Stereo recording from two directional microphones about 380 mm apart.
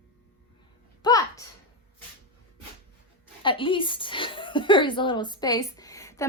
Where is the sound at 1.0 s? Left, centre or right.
Centre.